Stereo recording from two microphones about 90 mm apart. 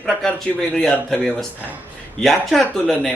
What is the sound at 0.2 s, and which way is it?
A man's voice, 5° left (ahead or behind).